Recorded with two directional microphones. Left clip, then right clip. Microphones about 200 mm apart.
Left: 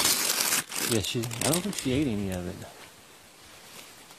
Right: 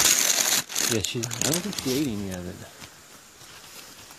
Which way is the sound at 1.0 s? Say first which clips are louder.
Right 2 dB; 15° left (ahead or behind).